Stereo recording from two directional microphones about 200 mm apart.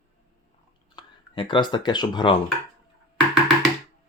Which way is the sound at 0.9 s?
25° left (ahead or behind).